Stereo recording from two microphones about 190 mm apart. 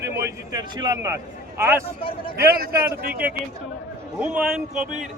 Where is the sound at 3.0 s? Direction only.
50° right (ahead or behind).